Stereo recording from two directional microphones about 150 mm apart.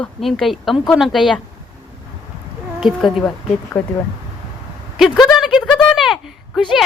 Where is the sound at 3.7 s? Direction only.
10° left (ahead or behind).